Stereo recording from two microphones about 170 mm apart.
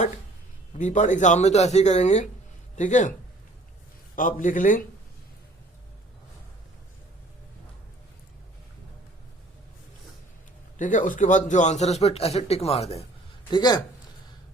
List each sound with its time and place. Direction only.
0.7 s speech: 45° left (ahead or behind)
4.1 s speech: 50° left (ahead or behind)
10.8 s speech: 50° left (ahead or behind)
13.5 s speech: 25° left (ahead or behind)